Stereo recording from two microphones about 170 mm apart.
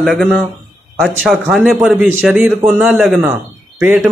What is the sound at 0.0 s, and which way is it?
A man's voice, centre (ahead or behind).